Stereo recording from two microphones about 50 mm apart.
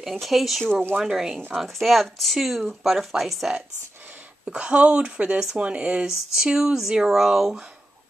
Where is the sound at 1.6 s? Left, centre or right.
Centre.